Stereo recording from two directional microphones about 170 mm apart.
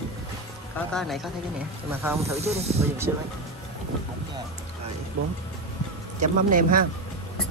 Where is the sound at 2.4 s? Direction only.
40° right (ahead or behind).